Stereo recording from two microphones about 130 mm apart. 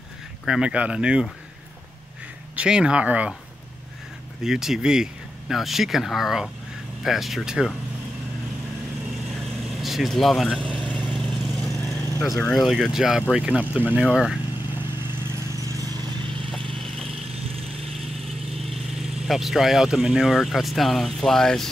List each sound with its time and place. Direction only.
0.5 s speech: 5° right (ahead or behind)
2.5 s speech: 5° right (ahead or behind)
4.4 s speech: 5° right (ahead or behind)
9.3 s vehicle: centre (ahead or behind)
12.1 s vehicle: 25° left (ahead or behind)
12.4 s speech: 10° left (ahead or behind)
12.6 s speech: centre (ahead or behind)
14.7 s vehicle: 15° right (ahead or behind)
16.7 s vehicle: 5° left (ahead or behind)
17.1 s lawn mower: 50° right (ahead or behind)
18.5 s speech: centre (ahead or behind)